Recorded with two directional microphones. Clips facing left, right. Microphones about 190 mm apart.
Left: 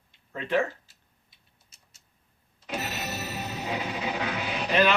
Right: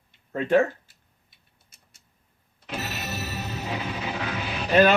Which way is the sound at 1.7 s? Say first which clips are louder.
Right 3 dB; 55° right (ahead or behind).